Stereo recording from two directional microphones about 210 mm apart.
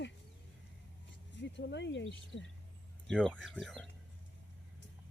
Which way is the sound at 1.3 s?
55° left (ahead or behind).